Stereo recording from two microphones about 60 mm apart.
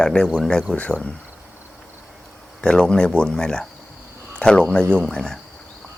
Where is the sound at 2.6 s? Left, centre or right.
Centre.